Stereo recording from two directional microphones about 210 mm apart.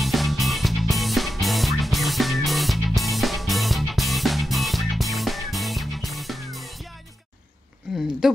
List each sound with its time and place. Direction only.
0.0 s music: centre (ahead or behind)